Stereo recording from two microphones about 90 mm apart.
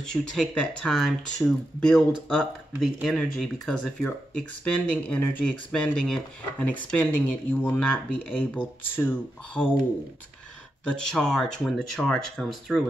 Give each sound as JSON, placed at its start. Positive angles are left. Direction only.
{"t": 0.0, "sound": "speech", "side_deg": 10}
{"t": 3.1, "sound": "speech", "side_deg": 5}
{"t": 5.7, "sound": "speech", "side_deg": 10}
{"t": 10.9, "sound": "speech", "side_deg": 5}